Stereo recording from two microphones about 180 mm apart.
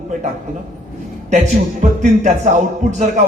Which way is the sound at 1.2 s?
40° right (ahead or behind).